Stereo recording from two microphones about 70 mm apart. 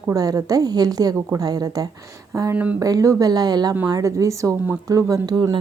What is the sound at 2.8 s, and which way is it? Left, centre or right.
Speech, right.